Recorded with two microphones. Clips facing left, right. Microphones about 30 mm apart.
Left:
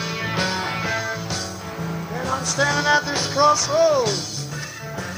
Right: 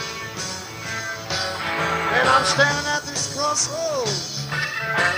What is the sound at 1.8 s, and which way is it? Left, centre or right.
Music, right.